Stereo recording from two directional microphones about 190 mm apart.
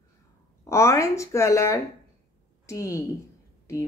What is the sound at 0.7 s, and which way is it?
A woman's voice, 15° left (ahead or behind).